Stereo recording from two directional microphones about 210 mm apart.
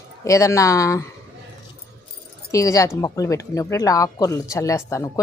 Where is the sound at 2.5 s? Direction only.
15° left (ahead or behind).